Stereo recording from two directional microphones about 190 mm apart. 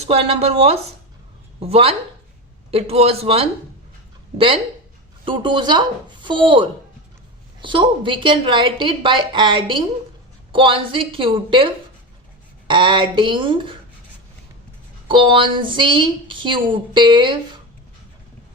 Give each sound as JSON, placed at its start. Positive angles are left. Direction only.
{"t": 0.0, "sound": "a woman's voice", "side_deg": -35}
{"t": 15.0, "sound": "a woman's voice", "side_deg": -25}